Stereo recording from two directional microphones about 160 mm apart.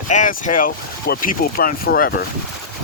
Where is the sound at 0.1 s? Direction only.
50° left (ahead or behind); by 2.1 s 70° left (ahead or behind).